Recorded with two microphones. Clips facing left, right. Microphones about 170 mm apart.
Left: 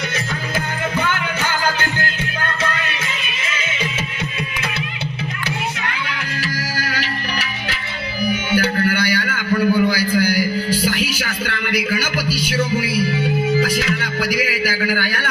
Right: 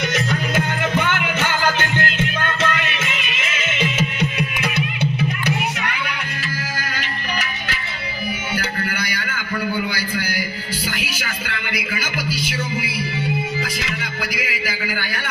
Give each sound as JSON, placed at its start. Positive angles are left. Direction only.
{"t": 1.0, "sound": "music", "side_deg": -20}
{"t": 3.6, "sound": "music", "side_deg": -20}
{"t": 8.8, "sound": "a sound", "side_deg": 40}
{"t": 10.8, "sound": "music", "side_deg": 40}